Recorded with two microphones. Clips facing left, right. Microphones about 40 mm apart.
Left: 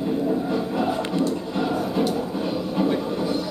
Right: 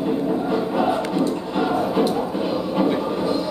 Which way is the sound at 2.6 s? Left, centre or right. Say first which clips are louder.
Right 2 dB; centre.